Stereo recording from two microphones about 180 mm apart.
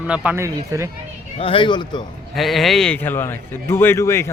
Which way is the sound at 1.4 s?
30° left (ahead or behind).